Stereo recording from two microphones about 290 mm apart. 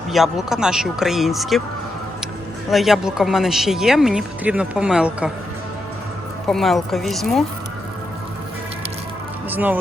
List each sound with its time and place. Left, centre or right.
0.1 s speech: centre
2.6 s speech: centre
6.5 s speech: centre
9.5 s speech: centre